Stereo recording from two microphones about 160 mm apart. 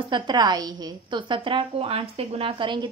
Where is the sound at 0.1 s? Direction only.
25° right (ahead or behind).